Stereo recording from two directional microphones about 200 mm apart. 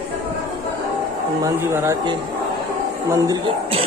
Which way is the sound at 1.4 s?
10° right (ahead or behind).